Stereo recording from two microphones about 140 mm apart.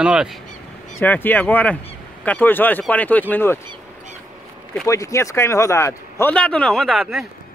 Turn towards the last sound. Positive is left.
turn(degrees=0)  # may be behind; listen again after turning